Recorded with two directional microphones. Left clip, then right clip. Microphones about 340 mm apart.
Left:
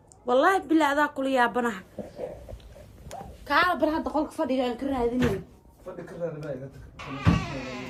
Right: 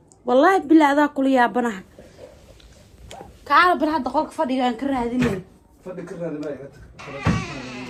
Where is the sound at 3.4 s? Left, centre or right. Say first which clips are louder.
Right 7 dB; centre.